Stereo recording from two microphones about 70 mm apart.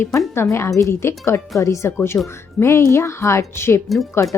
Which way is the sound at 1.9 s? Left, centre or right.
Left.